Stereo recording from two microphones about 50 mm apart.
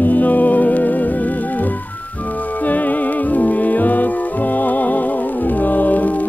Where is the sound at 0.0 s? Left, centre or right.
Left.